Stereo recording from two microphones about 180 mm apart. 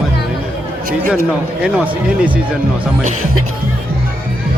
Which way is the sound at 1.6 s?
5° right (ahead or behind).